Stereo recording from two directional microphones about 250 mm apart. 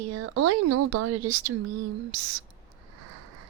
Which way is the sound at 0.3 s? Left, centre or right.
Right.